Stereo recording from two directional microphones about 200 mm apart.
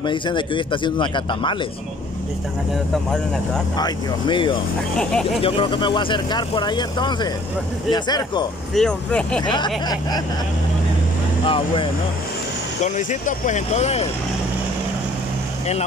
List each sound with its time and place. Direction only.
0.0 s speech: 25° left (ahead or behind)
2.9 s speech: centre (ahead or behind)
3.7 s speech: 20° left (ahead or behind)
4.9 s speech: 5° left (ahead or behind)
5.4 s speech: 25° left (ahead or behind)
8.7 s speech: 5° left (ahead or behind)
9.4 s speech: 20° left (ahead or behind)
11.4 s speech: 25° left (ahead or behind)
12.8 s speech: 35° left (ahead or behind)